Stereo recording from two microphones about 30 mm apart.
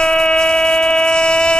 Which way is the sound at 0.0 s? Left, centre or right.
Left.